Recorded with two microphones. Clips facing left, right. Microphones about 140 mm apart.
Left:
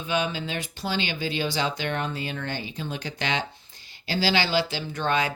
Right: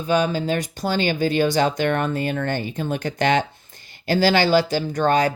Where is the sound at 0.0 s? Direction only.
40° right (ahead or behind).